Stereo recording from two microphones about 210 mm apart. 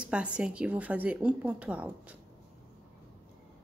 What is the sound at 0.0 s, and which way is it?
A woman's voice, 5° right (ahead or behind).